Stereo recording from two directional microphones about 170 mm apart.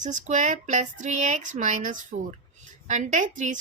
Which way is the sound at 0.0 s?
45° right (ahead or behind).